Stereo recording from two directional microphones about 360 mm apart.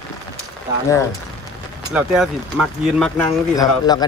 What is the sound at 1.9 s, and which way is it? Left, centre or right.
Speech, centre.